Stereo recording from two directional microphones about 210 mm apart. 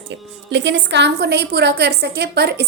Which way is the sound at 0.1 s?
55° right (ahead or behind).